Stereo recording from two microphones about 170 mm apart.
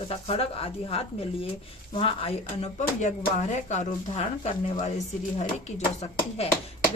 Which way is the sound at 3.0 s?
45° left (ahead or behind).